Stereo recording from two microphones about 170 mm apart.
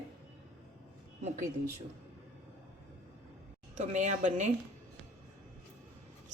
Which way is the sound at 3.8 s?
45° right (ahead or behind).